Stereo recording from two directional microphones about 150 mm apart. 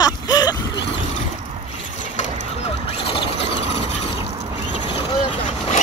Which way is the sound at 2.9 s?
40° left (ahead or behind).